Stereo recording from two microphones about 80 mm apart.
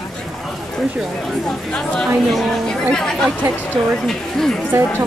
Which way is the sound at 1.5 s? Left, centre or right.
Centre.